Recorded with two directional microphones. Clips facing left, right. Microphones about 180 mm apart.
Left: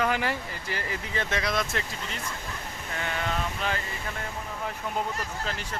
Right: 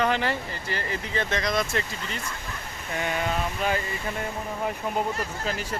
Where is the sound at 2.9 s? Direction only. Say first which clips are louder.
Right 4 dB; 15° right (ahead or behind).